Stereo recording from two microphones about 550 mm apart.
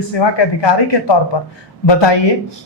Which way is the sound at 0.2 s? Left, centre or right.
Left.